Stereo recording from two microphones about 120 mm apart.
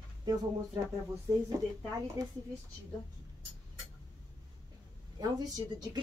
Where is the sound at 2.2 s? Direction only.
30° right (ahead or behind).